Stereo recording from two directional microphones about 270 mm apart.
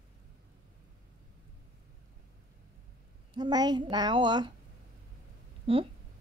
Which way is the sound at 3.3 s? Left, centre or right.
Centre.